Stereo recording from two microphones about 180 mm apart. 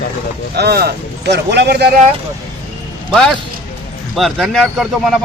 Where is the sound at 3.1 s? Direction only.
5° left (ahead or behind).